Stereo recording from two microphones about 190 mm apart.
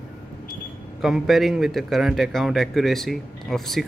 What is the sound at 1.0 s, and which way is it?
A man's voice, centre (ahead or behind).